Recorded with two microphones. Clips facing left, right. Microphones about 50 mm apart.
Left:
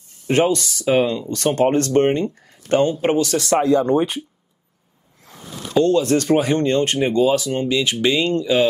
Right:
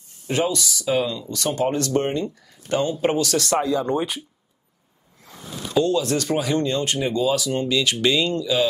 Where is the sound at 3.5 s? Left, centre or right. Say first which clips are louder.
Left 8 dB; left.